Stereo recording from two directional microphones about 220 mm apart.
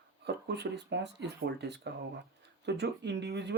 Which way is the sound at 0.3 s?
50° right (ahead or behind).